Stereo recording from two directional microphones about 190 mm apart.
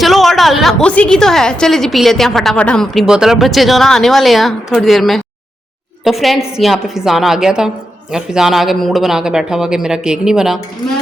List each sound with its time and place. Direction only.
0.0 s a woman's voice: centre (ahead or behind)